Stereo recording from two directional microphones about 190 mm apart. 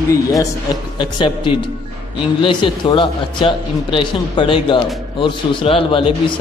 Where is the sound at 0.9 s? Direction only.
25° left (ahead or behind).